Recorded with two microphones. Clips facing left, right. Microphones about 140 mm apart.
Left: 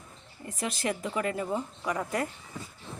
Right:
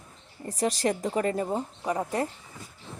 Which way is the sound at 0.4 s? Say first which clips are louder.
Right 5 dB; 40° right (ahead or behind).